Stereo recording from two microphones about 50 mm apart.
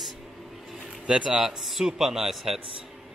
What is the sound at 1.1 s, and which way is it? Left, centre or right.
Speech, centre.